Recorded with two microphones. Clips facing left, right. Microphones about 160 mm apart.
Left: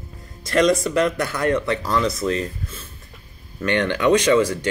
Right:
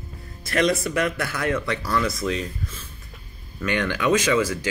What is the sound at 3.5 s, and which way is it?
Speech, 25° left (ahead or behind).